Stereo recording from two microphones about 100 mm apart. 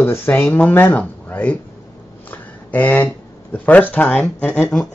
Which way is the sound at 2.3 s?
15° left (ahead or behind).